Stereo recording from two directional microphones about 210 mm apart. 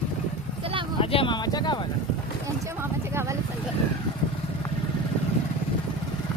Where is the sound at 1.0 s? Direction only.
25° left (ahead or behind).